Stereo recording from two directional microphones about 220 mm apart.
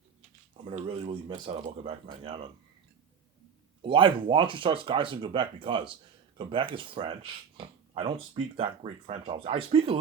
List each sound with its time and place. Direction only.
0.2 s speech: 25° right (ahead or behind)
3.8 s speech: 20° right (ahead or behind)